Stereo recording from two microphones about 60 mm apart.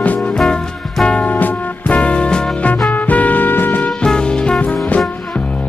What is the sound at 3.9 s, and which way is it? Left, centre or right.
Music, centre.